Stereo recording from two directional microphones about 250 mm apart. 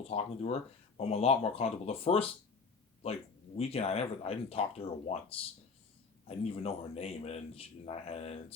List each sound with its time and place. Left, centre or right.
0.0 s a man's voice: left
3.6 s a man's voice: left